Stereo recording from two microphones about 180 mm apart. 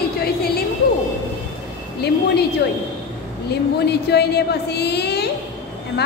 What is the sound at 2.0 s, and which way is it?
Speech, 65° left (ahead or behind).